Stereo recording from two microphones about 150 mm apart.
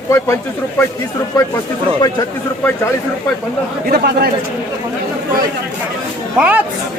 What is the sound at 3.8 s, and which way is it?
Speech, 90° right.